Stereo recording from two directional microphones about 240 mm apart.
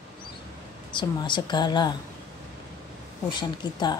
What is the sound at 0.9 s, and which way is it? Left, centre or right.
Speech, centre.